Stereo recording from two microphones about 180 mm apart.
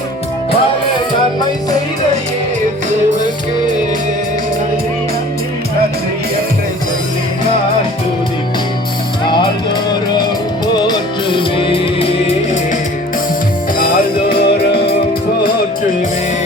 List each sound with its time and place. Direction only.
9.2 s music: 25° left (ahead or behind)
10.8 s music: 25° left (ahead or behind)
14.3 s music: 65° left (ahead or behind)